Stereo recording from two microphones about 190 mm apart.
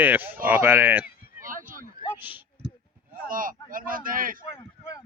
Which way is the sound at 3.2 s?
45° right (ahead or behind).